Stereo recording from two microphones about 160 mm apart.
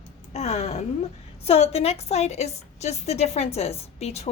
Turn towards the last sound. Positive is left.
turn(degrees=40)  # may be behind; listen again after turning